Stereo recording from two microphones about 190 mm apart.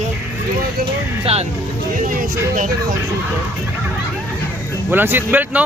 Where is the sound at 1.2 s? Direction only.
30° right (ahead or behind).